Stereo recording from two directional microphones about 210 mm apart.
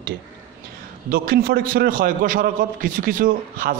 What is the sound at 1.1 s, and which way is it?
A man's voice, 45° right (ahead or behind).